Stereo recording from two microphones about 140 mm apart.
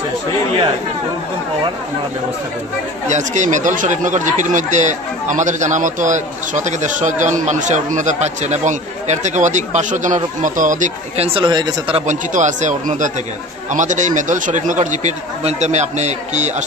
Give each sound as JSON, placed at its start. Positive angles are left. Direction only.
{"t": 3.1, "sound": "speech", "side_deg": -60}
{"t": 11.1, "sound": "speech", "side_deg": -40}
{"t": 12.1, "sound": "speech", "side_deg": -60}